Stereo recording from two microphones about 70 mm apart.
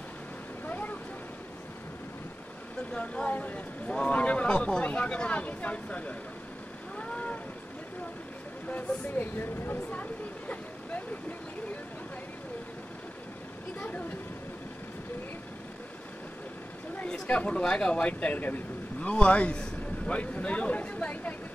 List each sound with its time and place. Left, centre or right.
0.7 s vehicle: left
2.9 s speech: centre
7.0 s a sound: centre
8.6 s speech: left
10.5 s vehicle: left
13.7 s speech: left
17.0 s speech: centre